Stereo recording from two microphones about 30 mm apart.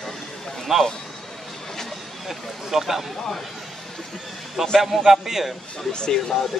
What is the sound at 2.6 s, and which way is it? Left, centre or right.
Speech, centre.